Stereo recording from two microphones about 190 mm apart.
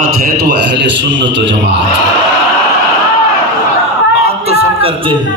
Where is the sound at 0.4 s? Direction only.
65° right (ahead or behind).